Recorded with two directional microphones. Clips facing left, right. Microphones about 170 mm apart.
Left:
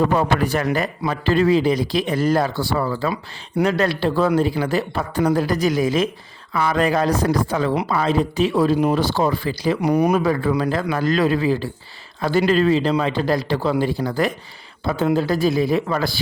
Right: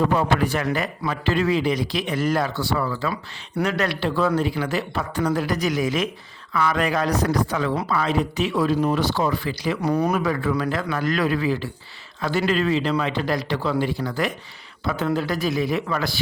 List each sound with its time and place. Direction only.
0.2 s speech: 40° left (ahead or behind)
9.8 s speech: 15° left (ahead or behind)
10.2 s speech: 30° left (ahead or behind)